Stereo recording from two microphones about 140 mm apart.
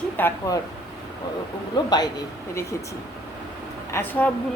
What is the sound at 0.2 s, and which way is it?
Speech, 20° left (ahead or behind).